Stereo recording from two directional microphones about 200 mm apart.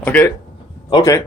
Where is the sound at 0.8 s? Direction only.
20° left (ahead or behind).